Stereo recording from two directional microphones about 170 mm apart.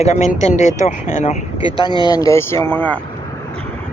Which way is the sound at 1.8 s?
25° left (ahead or behind).